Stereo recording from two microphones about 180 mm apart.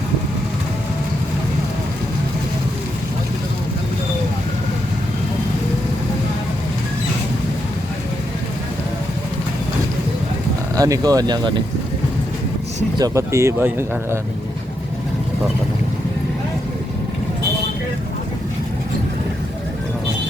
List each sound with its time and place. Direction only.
10.8 s speech: 20° right (ahead or behind)
13.0 s speech: 15° right (ahead or behind)